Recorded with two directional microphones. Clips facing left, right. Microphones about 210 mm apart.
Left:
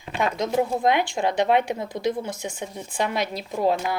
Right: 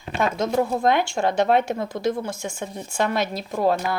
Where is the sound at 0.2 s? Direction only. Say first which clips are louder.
Right 1 dB; 15° left (ahead or behind).